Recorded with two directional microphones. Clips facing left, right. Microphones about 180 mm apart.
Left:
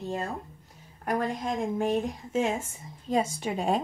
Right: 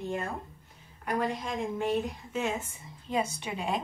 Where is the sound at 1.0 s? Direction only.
45° left (ahead or behind).